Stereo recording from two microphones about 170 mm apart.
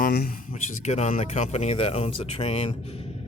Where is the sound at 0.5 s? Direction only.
40° left (ahead or behind).